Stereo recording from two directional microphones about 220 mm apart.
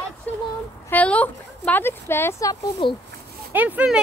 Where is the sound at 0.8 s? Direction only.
5° left (ahead or behind).